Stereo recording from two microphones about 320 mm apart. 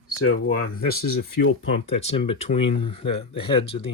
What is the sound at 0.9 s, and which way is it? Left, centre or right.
Speech, left.